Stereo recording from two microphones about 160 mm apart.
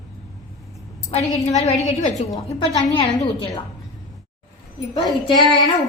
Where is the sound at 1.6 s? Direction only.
45° left (ahead or behind).